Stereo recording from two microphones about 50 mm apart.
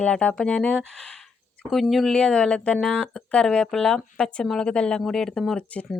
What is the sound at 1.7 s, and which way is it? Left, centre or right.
Speech, centre.